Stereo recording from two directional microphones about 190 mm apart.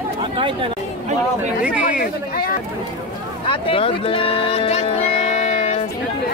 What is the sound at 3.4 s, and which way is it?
Speech, 30° left (ahead or behind).